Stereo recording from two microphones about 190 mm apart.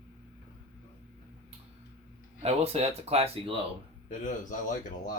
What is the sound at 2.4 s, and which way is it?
Speech, 30° right (ahead or behind).